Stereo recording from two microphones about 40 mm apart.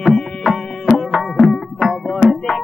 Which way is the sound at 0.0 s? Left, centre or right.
Centre.